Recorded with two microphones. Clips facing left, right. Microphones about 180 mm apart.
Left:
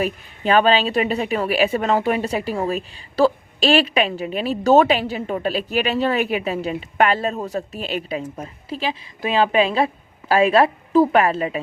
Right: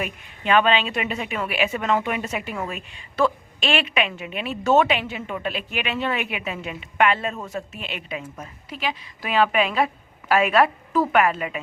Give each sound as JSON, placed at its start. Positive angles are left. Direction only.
{"t": 0.0, "sound": "a woman's voice", "side_deg": 35}